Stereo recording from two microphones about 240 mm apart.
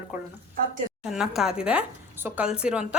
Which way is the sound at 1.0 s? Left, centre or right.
Centre.